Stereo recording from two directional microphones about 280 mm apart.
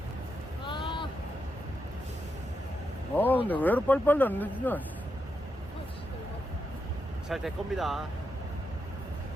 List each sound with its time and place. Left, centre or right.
0.7 s vehicle: centre
3.2 s speech: centre
7.3 s speech: centre